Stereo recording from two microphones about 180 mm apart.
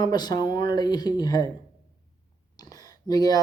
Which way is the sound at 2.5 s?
20° left (ahead or behind).